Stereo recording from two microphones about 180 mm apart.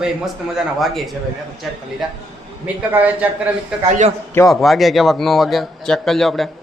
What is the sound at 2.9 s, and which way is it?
Speech, 10° right (ahead or behind).